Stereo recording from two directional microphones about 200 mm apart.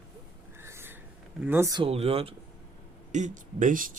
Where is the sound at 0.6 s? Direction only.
10° right (ahead or behind).